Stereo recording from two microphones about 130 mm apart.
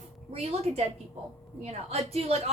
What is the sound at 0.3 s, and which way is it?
A woman's voice, 55° right (ahead or behind).